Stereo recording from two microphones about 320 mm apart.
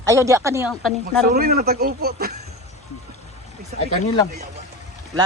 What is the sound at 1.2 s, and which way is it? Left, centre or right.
A man's voice, right.